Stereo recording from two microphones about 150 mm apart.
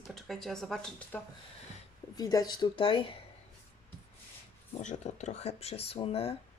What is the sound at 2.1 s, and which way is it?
Speech, 25° left (ahead or behind).